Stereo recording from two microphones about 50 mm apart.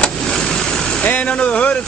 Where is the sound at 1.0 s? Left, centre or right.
Left.